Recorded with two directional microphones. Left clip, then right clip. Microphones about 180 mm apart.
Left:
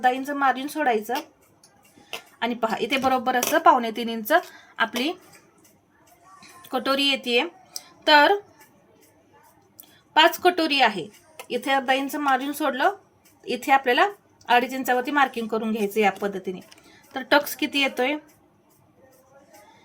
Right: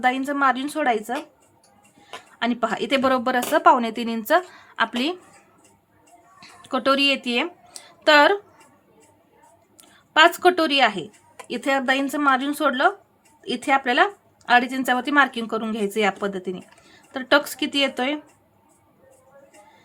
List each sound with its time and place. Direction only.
0.0 s speech: 30° right (ahead or behind)
2.4 s speech: 25° right (ahead or behind)
6.4 s speech: 30° right (ahead or behind)
10.1 s speech: 25° right (ahead or behind)